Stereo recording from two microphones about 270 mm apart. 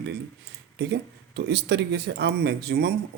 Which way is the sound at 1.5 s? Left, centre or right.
Right.